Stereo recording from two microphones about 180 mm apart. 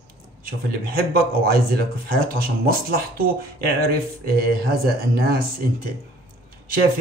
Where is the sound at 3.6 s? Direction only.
55° right (ahead or behind).